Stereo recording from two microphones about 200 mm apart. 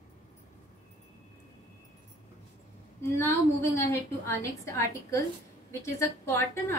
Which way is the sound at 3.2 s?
10° left (ahead or behind).